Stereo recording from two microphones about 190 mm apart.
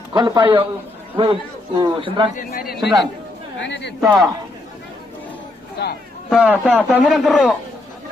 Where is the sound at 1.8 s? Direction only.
25° right (ahead or behind).